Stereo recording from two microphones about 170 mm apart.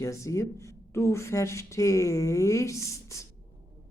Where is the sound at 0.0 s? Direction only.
15° left (ahead or behind).